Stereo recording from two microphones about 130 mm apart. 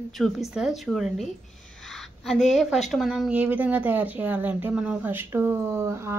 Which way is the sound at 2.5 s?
Centre (ahead or behind).